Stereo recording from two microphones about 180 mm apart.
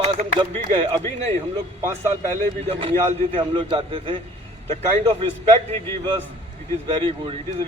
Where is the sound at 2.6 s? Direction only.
35° right (ahead or behind).